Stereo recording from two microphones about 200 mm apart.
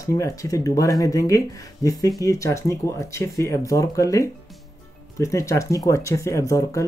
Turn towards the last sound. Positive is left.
turn(degrees=15)  # may be behind; listen again after turning